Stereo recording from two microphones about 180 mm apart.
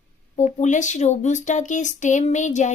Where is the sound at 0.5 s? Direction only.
40° left (ahead or behind).